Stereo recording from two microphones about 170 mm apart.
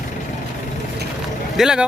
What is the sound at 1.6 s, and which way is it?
Speech, 5° right (ahead or behind).